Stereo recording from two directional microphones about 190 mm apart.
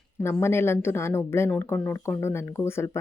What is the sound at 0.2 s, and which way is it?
Speech, 10° left (ahead or behind).